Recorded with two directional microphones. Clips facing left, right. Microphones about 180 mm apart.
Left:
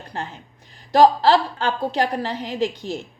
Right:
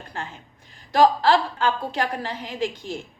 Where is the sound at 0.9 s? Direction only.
40° left (ahead or behind).